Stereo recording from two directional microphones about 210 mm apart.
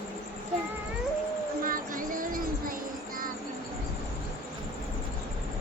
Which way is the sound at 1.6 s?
40° right (ahead or behind).